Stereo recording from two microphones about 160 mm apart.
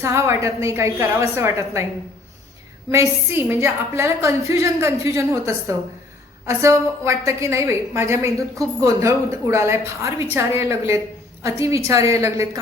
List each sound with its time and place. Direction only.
0.0 s a woman's voice: 15° right (ahead or behind)
2.9 s a woman's voice: 15° right (ahead or behind)